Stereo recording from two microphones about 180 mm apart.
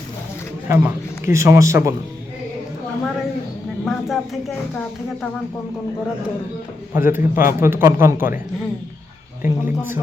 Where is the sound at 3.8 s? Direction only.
Centre (ahead or behind).